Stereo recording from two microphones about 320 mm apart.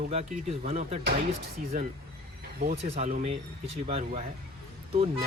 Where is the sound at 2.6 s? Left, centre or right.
Right.